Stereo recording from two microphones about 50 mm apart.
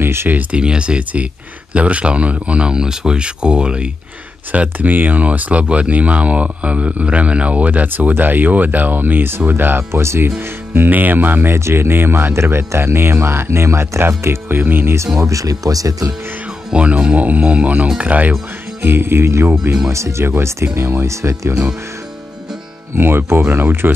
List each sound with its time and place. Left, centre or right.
0.0 s a sound: right
0.3 s speech: right
0.6 s speech: right
4.5 s speech: right
9.5 s music: right
9.8 s speech: right
10.7 s speech: right
11.5 s speech: right
14.6 s music: right
16.7 s speech: right
18.8 s music: right
19.9 s speech: right
20.4 s speech: right
22.9 s music: right